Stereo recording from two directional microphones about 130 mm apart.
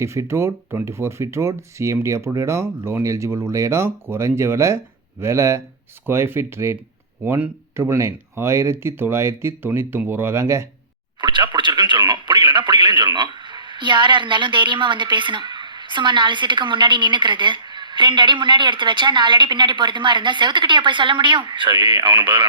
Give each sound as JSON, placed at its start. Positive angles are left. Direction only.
{"t": 0.0, "sound": "speech", "side_deg": -20}
{"t": 11.2, "sound": "a sound", "side_deg": -35}
{"t": 11.5, "sound": "speech", "side_deg": -35}